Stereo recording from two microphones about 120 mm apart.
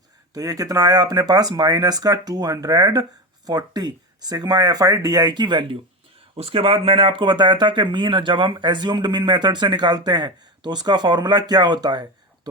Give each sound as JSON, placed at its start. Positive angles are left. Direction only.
{"t": 0.3, "sound": "speech", "side_deg": -30}